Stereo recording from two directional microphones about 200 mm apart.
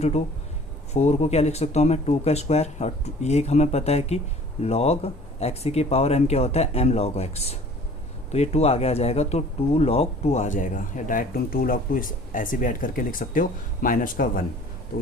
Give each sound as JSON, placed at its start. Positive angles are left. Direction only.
{"t": 0.9, "sound": "speech", "side_deg": 35}